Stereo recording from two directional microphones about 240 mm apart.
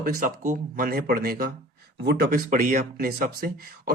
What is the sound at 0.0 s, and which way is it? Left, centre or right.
Speech, right.